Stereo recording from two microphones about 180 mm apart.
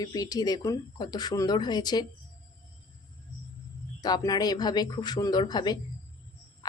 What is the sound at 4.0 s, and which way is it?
Speech, 20° left (ahead or behind).